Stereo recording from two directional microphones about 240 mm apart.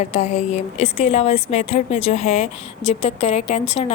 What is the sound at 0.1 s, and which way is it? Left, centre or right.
A woman's voice, left.